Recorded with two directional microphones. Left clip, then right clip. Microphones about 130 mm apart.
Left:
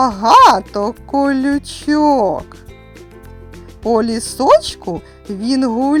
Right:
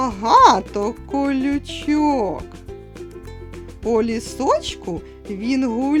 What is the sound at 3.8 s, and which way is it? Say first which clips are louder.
Speech: left 4 dB; 40° left (ahead or behind).